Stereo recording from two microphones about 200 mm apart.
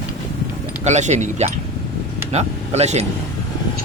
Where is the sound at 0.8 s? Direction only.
35° right (ahead or behind).